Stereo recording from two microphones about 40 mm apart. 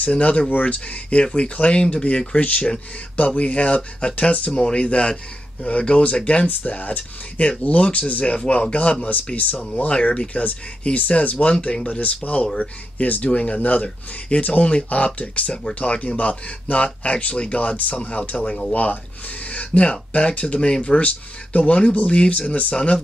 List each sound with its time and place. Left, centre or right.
0.0 s speech: left
0.5 s speech: left
0.7 s speech: left
9.0 s speech: left
13.6 s speech: left
18.5 s speech: left
19.4 s speech: left